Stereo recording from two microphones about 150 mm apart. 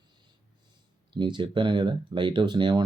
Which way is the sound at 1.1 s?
30° right (ahead or behind).